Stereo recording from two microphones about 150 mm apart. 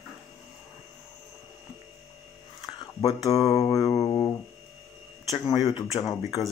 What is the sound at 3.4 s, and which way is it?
Speech, 25° left (ahead or behind).